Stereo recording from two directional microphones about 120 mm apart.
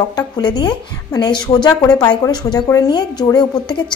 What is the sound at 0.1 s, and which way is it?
A woman's voice, 35° left (ahead or behind).